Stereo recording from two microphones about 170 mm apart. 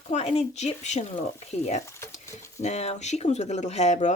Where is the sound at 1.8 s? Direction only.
15° left (ahead or behind).